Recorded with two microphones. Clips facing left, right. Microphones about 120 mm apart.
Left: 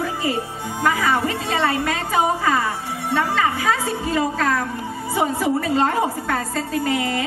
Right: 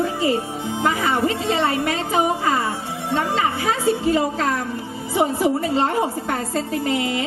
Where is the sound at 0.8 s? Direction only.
20° right (ahead or behind).